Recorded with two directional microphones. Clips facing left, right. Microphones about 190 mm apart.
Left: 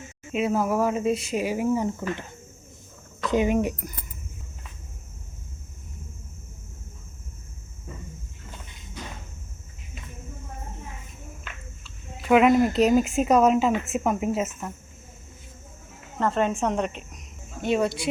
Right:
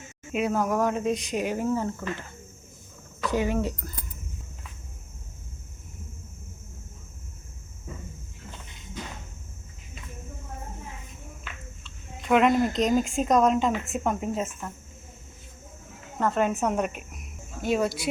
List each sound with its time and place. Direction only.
0.3 s speech: 5° left (ahead or behind)
3.2 s speech: 20° left (ahead or behind)
11.8 s speech: 5° left (ahead or behind)
16.1 s speech: 5° right (ahead or behind)